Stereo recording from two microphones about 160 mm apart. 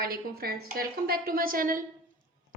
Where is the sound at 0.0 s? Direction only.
70° right (ahead or behind).